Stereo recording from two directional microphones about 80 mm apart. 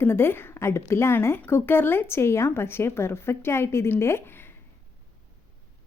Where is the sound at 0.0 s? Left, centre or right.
Left.